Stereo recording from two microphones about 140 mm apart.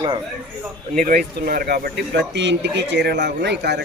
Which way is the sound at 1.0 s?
90° right.